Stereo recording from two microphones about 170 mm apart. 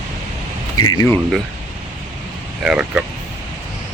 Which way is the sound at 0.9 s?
20° left (ahead or behind).